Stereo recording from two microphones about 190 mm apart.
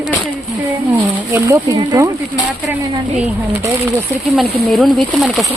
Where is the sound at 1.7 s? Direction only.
20° right (ahead or behind).